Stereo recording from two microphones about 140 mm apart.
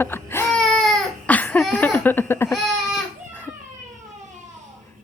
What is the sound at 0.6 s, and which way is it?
Baby cry, centre (ahead or behind).